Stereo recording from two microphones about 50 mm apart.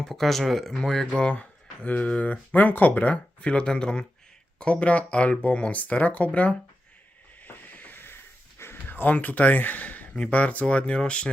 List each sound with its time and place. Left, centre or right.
0.0 s speech: centre
1.3 s speech: left
7.4 s a sound: left; by 11.3 s centre